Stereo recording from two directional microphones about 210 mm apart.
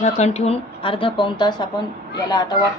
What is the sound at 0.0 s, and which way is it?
A woman's voice, 30° left (ahead or behind).